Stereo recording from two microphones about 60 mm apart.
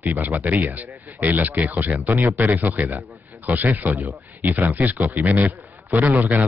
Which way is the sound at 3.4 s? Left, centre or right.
Right.